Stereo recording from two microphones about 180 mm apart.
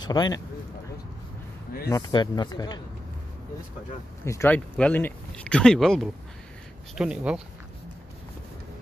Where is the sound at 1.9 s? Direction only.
20° left (ahead or behind).